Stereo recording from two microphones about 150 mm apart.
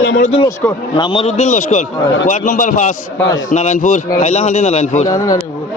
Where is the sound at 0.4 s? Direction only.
15° left (ahead or behind).